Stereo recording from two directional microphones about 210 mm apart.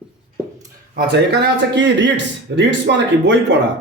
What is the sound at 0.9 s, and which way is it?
Speech, 50° right (ahead or behind).